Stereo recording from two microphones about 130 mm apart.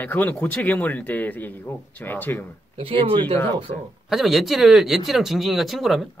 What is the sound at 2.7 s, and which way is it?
Speech, 45° right (ahead or behind).